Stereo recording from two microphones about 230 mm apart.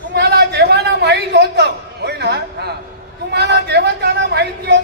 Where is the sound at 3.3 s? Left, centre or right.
Right.